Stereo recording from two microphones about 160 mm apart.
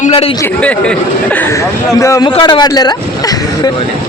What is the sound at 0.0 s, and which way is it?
Chatter, 40° left (ahead or behind).